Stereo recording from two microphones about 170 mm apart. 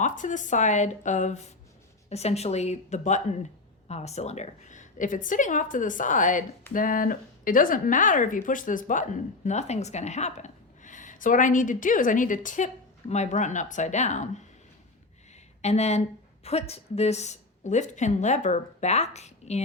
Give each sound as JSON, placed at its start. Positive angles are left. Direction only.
{"t": 0.0, "sound": "a woman's voice", "side_deg": 50}
{"t": 15.6, "sound": "a woman's voice", "side_deg": 40}